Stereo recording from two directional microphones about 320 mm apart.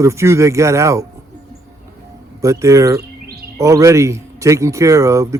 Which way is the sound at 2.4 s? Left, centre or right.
Centre.